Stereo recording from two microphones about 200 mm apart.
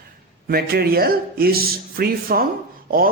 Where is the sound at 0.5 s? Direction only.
50° right (ahead or behind).